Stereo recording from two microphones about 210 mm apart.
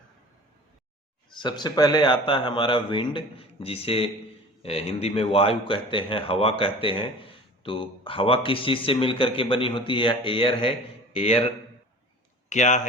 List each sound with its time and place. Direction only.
1.3 s speech: 20° left (ahead or behind)
12.5 s speech: 35° left (ahead or behind)